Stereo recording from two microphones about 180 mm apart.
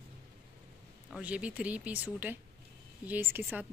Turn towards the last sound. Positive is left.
turn(degrees=-10)  # may be behind; listen again after turning